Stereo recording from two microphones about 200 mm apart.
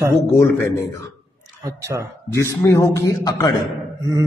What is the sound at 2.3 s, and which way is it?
A man's voice, 15° left (ahead or behind).